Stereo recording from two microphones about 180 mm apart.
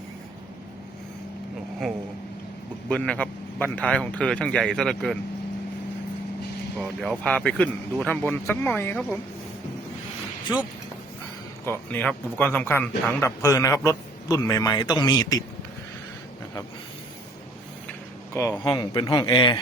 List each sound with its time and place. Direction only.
2.9 s a man's voice: 5° left (ahead or behind)
6.7 s a man's voice: centre (ahead or behind)
11.6 s a man's voice: 10° left (ahead or behind)
18.3 s speech: 15° left (ahead or behind)